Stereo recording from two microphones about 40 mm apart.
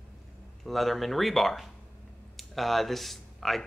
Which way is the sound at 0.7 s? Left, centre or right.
Centre.